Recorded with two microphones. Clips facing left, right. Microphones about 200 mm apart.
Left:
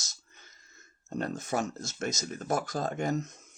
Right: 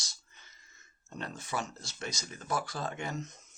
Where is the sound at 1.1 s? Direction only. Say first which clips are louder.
Left 6 dB; 45° left (ahead or behind).